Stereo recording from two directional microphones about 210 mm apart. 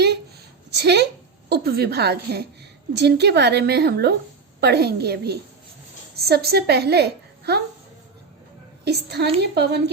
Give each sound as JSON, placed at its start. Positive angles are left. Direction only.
{"t": 0.8, "sound": "a woman's voice", "side_deg": -50}
{"t": 8.8, "sound": "a woman's voice", "side_deg": -50}